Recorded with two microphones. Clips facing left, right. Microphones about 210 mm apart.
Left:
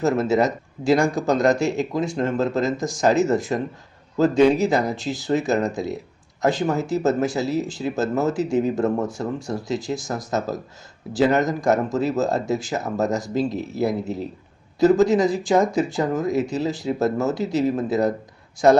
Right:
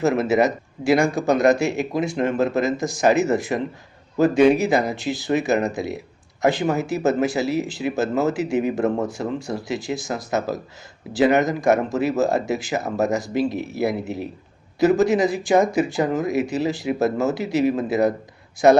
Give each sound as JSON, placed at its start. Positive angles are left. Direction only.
{"t": 0.0, "sound": "speech", "side_deg": -10}
{"t": 13.3, "sound": "speech", "side_deg": -70}
{"t": 13.7, "sound": "speech", "side_deg": -10}